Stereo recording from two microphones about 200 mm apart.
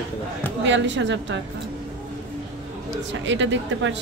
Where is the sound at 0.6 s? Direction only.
65° right (ahead or behind).